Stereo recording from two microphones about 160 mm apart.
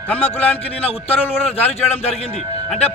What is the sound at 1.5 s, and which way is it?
Speech, 40° left (ahead or behind).